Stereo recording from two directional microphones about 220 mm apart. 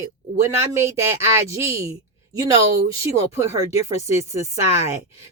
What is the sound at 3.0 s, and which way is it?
Speech, 15° right (ahead or behind).